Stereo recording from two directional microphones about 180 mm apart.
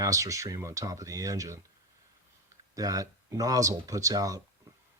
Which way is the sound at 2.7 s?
20° right (ahead or behind).